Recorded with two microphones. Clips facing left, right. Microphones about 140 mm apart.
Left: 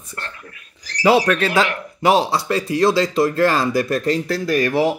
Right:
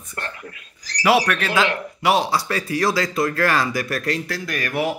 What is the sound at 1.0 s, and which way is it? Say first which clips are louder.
A man's voice: left 3 dB; 30° left (ahead or behind).